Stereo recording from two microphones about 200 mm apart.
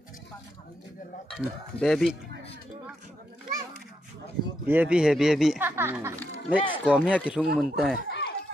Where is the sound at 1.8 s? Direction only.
Centre (ahead or behind).